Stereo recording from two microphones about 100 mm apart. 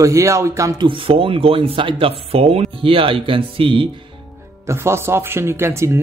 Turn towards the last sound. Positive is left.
turn(degrees=-25)  # may be behind; listen again after turning